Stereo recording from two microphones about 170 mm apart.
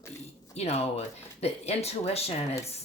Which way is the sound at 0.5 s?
40° left (ahead or behind).